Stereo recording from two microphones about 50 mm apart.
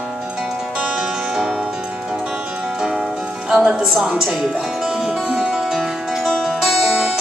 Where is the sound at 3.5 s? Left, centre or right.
Centre.